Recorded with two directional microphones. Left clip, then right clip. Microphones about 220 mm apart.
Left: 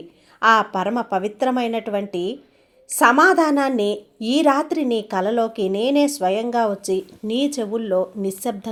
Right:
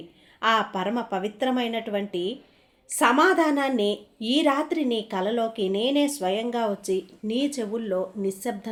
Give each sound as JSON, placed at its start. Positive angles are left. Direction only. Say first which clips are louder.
{"t": 0.3, "sound": "a woman's voice", "louder": "left 7 dB", "side_deg": 25}